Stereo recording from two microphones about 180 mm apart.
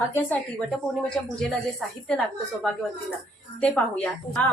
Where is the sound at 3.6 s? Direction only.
5° left (ahead or behind).